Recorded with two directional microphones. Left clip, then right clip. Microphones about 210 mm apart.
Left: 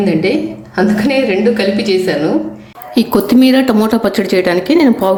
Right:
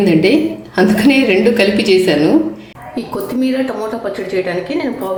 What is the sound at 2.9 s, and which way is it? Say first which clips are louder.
A woman's voice: left 9 dB; 45° left (ahead or behind).